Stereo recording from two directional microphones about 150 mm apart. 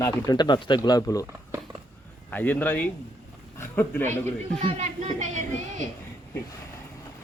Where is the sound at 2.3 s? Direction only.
10° left (ahead or behind).